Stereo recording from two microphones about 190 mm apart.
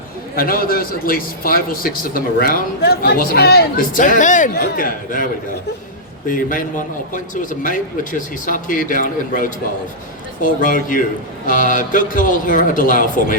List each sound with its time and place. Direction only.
0.3 s a man's voice: 50° left (ahead or behind)
8.4 s a man's voice: 45° left (ahead or behind)